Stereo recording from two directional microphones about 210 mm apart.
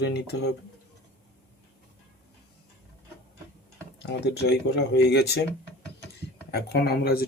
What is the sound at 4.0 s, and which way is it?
Speech, 55° left (ahead or behind).